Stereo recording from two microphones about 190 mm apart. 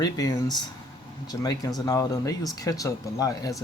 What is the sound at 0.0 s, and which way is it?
Speech, 20° left (ahead or behind).